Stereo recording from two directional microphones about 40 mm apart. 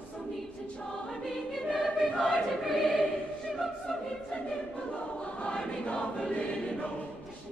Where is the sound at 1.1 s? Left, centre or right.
Centre.